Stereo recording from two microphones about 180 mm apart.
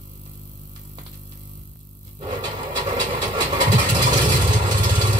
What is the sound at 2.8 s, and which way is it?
Vehicle, 25° right (ahead or behind).